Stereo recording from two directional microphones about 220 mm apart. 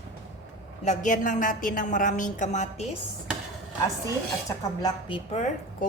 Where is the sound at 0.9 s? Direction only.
35° left (ahead or behind).